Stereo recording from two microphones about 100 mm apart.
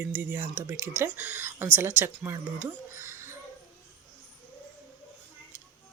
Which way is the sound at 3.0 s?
25° right (ahead or behind).